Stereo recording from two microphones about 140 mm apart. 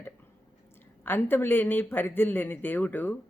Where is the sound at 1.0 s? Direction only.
15° left (ahead or behind).